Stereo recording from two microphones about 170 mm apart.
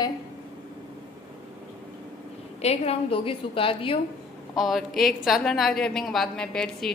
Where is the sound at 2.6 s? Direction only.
40° left (ahead or behind).